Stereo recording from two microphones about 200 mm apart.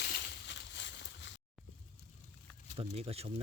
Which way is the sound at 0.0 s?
60° left (ahead or behind).